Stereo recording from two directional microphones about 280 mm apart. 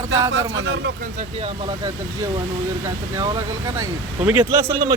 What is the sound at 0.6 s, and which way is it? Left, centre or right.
Speech, right.